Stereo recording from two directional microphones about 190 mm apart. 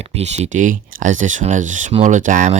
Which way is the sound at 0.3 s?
40° right (ahead or behind).